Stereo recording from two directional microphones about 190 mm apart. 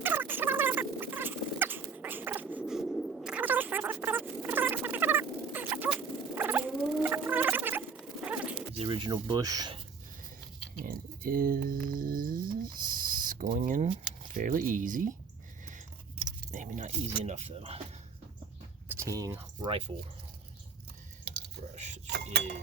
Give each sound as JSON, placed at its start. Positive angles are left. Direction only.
{"t": 0.0, "sound": "a sound", "side_deg": -10}
{"t": 8.5, "sound": "speech", "side_deg": -30}
{"t": 10.8, "sound": "a sound", "side_deg": -50}
{"t": 14.3, "sound": "speech", "side_deg": -45}
{"t": 16.5, "sound": "speech", "side_deg": -40}
{"t": 18.9, "sound": "speech", "side_deg": -15}